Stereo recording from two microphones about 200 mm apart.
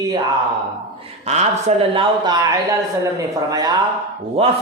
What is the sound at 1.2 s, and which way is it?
A man's voice, 35° right (ahead or behind).